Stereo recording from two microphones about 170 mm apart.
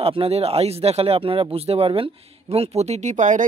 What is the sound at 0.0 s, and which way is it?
Speech, 35° right (ahead or behind).